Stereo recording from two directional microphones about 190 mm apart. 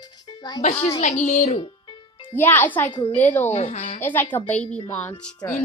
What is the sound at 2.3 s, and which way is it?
A woman's voice, 10° left (ahead or behind).